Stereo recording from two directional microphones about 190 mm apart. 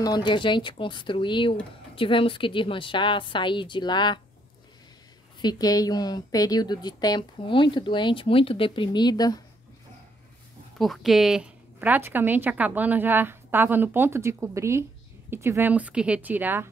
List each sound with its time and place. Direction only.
0.0 s speech: 20° left (ahead or behind)
5.4 s speech: 20° left (ahead or behind)
10.8 s a woman's voice: centre (ahead or behind)